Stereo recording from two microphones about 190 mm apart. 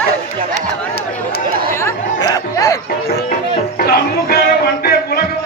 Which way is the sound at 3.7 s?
55° left (ahead or behind).